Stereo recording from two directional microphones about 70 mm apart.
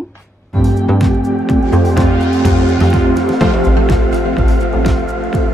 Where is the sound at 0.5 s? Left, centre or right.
Centre.